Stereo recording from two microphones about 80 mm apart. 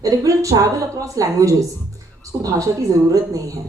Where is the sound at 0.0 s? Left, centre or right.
Right.